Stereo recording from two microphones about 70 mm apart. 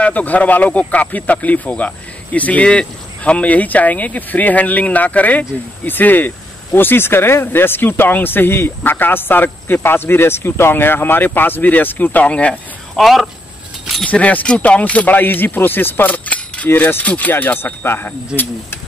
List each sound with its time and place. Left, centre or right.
0.0 s speech: left
12.9 s speech: centre
14.0 s speech: centre
16.6 s speech: left